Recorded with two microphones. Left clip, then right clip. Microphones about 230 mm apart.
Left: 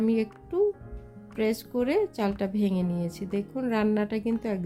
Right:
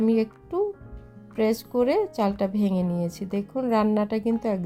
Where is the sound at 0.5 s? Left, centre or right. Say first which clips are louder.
Left 1 dB; centre.